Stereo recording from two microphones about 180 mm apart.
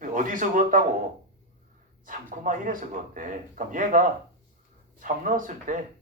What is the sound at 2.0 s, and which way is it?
Speech, 45° right (ahead or behind).